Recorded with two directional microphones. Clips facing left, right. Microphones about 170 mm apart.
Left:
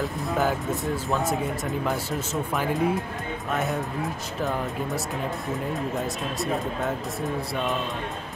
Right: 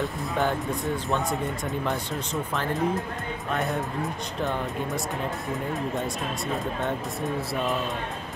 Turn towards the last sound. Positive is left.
turn(degrees=0)  # may be behind; listen again after turning